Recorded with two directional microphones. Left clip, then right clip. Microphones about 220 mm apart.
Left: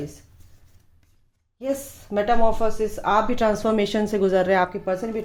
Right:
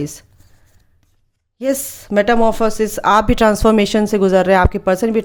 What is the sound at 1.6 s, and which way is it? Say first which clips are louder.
Speech: right 8 dB; 50° right (ahead or behind).